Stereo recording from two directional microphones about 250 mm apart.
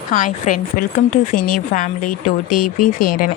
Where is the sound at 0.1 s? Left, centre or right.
Left.